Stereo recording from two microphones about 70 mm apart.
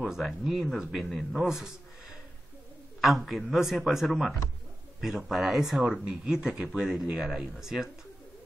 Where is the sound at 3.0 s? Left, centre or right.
Centre.